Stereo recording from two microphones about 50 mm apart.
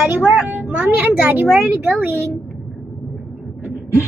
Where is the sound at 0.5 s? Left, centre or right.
Right.